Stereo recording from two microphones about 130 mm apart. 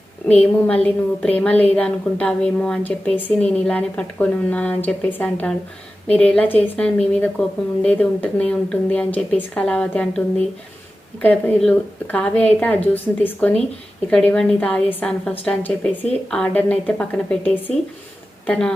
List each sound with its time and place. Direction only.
0.3 s a woman's voice: 10° left (ahead or behind)